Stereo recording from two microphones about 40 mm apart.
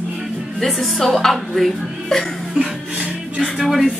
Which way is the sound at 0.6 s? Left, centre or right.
Centre.